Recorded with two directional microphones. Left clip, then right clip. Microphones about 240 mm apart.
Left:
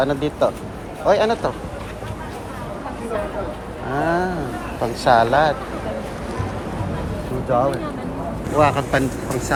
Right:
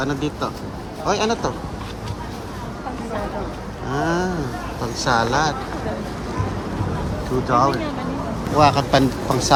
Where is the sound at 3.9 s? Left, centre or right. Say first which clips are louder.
Left 2 dB; centre.